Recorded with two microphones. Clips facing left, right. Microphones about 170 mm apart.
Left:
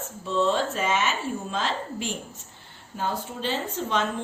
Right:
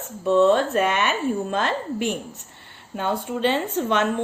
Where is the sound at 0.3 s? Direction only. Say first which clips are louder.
Right 7 dB; 60° right (ahead or behind).